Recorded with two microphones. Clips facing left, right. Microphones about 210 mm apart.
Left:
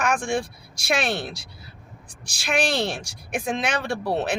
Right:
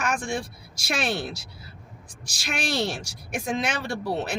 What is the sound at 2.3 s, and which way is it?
Speech, 60° left (ahead or behind).